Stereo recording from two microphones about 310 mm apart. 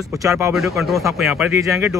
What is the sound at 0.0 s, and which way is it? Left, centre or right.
Speech, centre.